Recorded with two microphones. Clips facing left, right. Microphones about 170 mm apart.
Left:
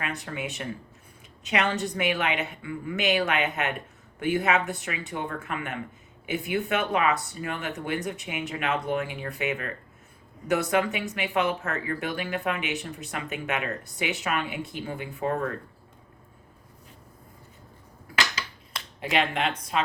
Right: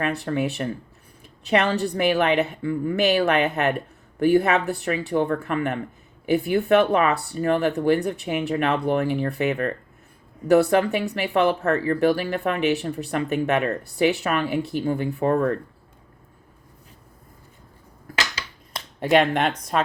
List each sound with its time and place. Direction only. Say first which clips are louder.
0.0 s speech: right 9 dB; 40° right (ahead or behind)
18.9 s speech: right 8 dB; 45° right (ahead or behind)